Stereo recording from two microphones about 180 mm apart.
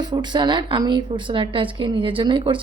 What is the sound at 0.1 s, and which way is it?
A woman's voice, 25° right (ahead or behind).